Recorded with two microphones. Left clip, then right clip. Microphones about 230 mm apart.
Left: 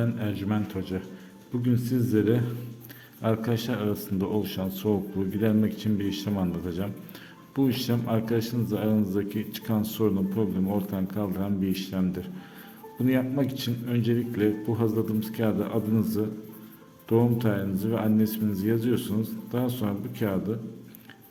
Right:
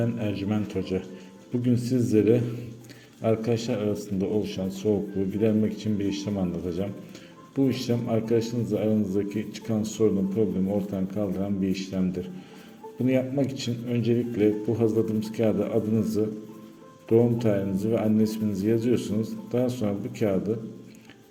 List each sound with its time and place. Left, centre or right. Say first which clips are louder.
0.0 s speech: right 2 dB; centre